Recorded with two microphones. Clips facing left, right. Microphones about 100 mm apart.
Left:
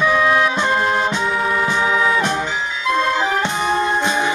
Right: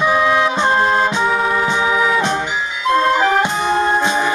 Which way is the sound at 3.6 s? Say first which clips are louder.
Right 2 dB; 35° right (ahead or behind).